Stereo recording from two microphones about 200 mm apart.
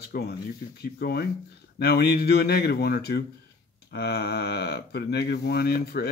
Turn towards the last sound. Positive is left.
turn(degrees=55)  # may be behind; listen again after turning